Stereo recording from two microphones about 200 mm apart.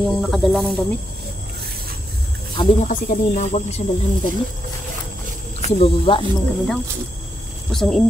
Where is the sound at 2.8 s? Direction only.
40° left (ahead or behind).